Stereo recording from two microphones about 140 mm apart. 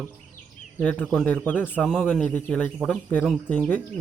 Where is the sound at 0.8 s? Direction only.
10° left (ahead or behind).